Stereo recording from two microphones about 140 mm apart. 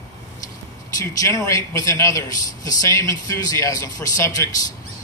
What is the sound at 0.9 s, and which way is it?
A man's voice, 20° left (ahead or behind).